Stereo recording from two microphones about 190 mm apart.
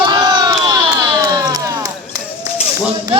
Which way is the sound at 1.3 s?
20° right (ahead or behind).